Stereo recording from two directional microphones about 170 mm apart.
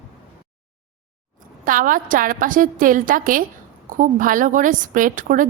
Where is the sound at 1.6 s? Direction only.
55° right (ahead or behind).